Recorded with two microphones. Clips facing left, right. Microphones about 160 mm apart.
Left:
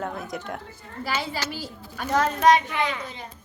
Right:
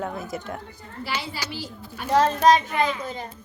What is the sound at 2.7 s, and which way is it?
Speech, 75° left (ahead or behind).